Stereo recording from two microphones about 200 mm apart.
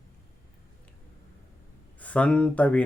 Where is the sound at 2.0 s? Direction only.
5° left (ahead or behind).